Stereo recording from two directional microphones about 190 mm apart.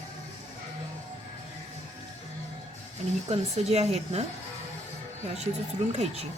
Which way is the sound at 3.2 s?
35° right (ahead or behind).